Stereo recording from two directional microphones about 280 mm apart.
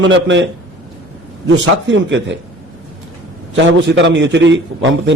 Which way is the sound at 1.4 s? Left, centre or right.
Right.